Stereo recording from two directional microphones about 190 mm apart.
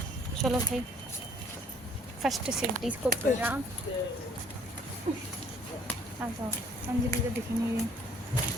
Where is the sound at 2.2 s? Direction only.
Centre (ahead or behind).